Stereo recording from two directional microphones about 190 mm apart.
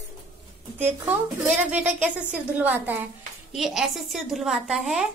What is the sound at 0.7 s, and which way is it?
A woman's voice, 10° right (ahead or behind).